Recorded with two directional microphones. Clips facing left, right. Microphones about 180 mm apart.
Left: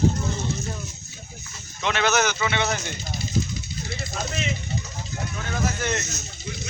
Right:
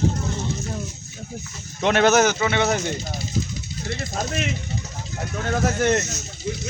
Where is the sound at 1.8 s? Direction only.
50° right (ahead or behind).